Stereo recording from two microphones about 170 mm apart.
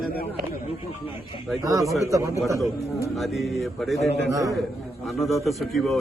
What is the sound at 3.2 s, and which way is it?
Speech, centre (ahead or behind).